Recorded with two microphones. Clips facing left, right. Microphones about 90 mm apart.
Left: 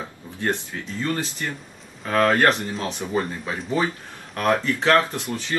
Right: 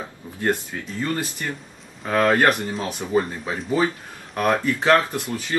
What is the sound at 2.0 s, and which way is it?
Speech, 15° right (ahead or behind).